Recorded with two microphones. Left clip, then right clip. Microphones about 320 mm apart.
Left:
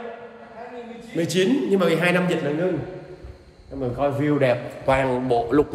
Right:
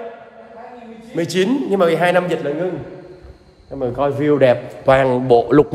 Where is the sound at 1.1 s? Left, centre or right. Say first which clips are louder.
Right 3 dB; centre.